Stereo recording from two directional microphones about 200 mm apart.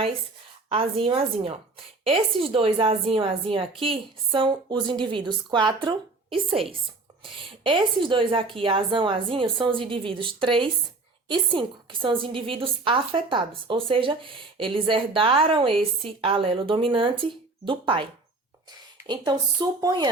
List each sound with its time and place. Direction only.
0.7 s a woman's voice: 30° right (ahead or behind)
19.0 s a woman's voice: 20° right (ahead or behind)